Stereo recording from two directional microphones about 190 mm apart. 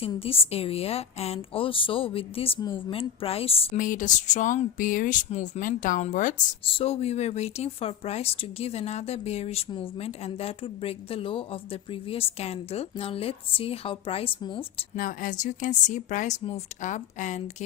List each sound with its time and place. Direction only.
0.0 s a woman's voice: 30° left (ahead or behind)
3.8 s speech: 45° left (ahead or behind); by 14.8 s 25° left (ahead or behind)
14.9 s speech: 45° left (ahead or behind)